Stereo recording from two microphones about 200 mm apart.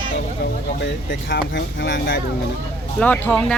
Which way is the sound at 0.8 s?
65° left (ahead or behind).